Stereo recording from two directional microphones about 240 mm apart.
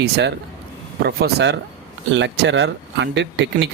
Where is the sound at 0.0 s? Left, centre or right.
Right.